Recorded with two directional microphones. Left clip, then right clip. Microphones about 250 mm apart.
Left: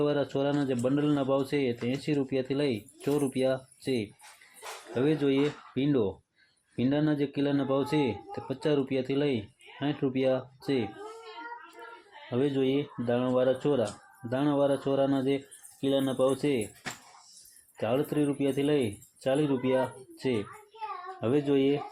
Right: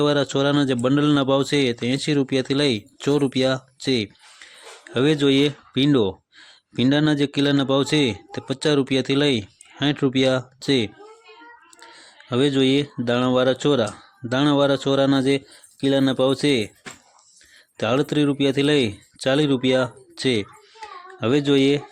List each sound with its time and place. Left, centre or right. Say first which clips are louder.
0.0 s a man's voice: right 8 dB; right
12.3 s a man's voice: right 9 dB; right
17.7 s a man's voice: right 8 dB; right